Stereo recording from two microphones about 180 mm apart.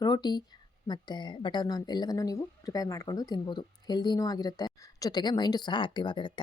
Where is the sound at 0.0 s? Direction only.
25° left (ahead or behind).